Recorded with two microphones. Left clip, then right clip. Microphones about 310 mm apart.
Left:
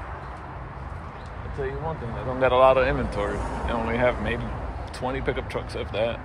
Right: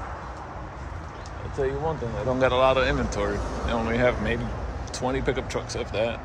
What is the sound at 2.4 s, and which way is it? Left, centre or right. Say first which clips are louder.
Speech: left 3 dB; centre.